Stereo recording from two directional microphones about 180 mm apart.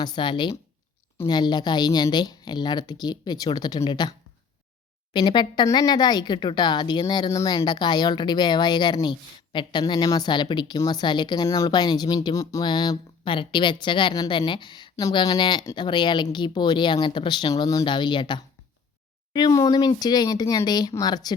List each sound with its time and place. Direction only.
0.0 s speech: 25° left (ahead or behind)
5.1 s speech: 25° left (ahead or behind)